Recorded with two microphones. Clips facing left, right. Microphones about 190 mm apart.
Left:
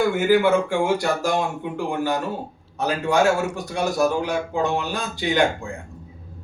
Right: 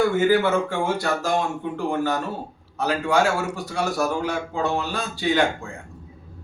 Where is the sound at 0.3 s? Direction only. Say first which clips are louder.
Left 2 dB; 10° left (ahead or behind).